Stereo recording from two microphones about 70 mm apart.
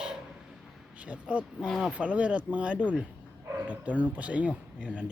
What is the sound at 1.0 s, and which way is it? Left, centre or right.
Speech, centre.